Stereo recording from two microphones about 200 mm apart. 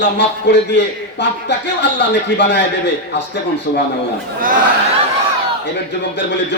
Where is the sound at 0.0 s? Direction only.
60° left (ahead or behind).